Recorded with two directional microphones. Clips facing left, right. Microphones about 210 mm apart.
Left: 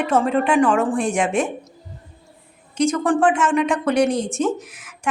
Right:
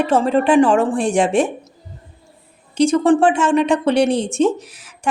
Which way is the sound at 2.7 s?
30° right (ahead or behind).